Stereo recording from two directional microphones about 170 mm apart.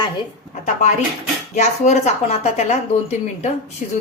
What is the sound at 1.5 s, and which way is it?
A woman's voice, 45° left (ahead or behind).